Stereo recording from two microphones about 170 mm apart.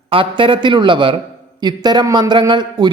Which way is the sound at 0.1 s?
30° right (ahead or behind).